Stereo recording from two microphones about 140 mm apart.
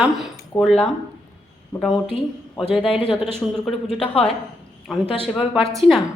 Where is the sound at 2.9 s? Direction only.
40° left (ahead or behind).